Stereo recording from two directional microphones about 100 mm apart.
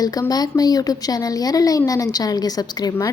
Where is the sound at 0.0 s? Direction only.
40° left (ahead or behind).